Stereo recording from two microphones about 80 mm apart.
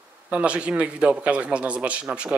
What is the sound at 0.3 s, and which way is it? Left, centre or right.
Speech, centre.